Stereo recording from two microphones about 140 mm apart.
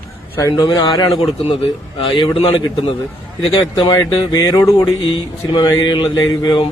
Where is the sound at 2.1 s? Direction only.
40° left (ahead or behind).